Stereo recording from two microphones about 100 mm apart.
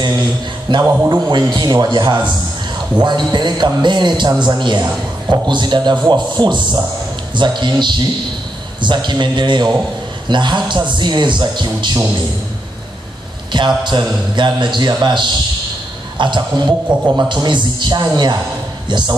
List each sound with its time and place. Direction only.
0.7 s a man's voice: 50° right (ahead or behind)
13.5 s a man's voice: 50° right (ahead or behind)